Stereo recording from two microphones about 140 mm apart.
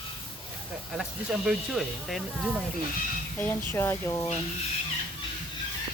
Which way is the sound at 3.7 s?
15° left (ahead or behind).